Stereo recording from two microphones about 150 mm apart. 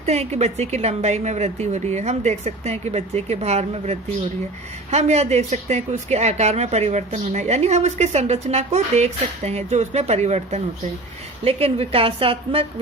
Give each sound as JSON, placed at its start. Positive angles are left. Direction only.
{"t": 0.0, "sound": "a woman's voice", "side_deg": -45}